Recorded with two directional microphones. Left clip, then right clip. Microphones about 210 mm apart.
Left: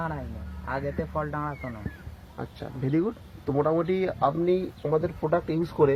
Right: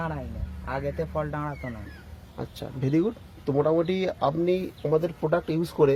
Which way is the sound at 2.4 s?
50° right (ahead or behind).